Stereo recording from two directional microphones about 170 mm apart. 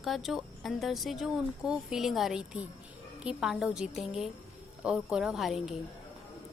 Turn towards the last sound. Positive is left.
turn(degrees=0)  # may be behind; listen again after turning